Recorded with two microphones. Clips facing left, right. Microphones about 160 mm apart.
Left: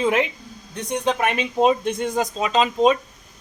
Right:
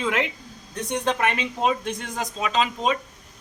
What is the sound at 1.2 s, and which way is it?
Speech, 20° left (ahead or behind).